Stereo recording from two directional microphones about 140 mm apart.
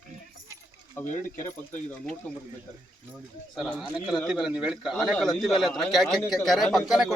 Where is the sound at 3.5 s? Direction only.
Centre (ahead or behind).